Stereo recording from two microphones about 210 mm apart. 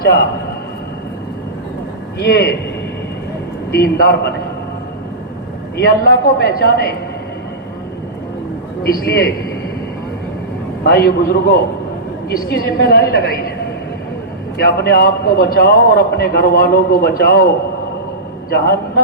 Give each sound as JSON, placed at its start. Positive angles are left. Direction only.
{"t": 2.1, "sound": "a man's voice", "side_deg": 45}
{"t": 3.7, "sound": "a man's voice", "side_deg": 50}
{"t": 5.7, "sound": "a man's voice", "side_deg": 50}
{"t": 8.8, "sound": "a man's voice", "side_deg": 50}
{"t": 10.8, "sound": "a man's voice", "side_deg": 45}
{"t": 14.6, "sound": "a man's voice", "side_deg": 45}